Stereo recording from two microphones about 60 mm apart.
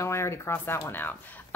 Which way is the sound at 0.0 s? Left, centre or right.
Left.